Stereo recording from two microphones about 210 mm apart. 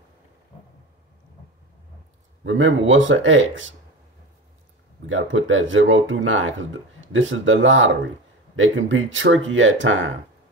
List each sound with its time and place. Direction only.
2.4 s speech: 65° right (ahead or behind)
5.0 s speech: 65° right (ahead or behind)